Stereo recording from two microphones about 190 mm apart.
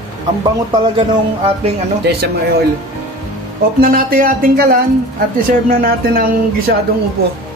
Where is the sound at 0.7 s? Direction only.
30° right (ahead or behind).